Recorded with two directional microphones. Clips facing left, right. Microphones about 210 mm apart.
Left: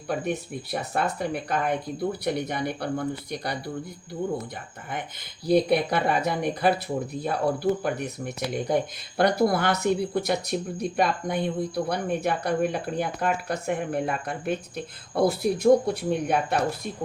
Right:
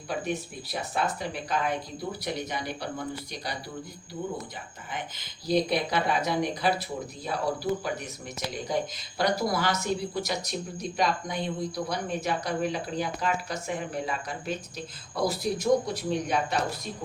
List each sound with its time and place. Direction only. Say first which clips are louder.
0.1 s speech: left 3 dB; 55° left (ahead or behind)
5.5 s speech: left 5 dB; 55° left (ahead or behind)